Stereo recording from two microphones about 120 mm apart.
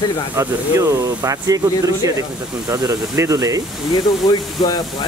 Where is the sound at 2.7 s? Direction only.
25° right (ahead or behind).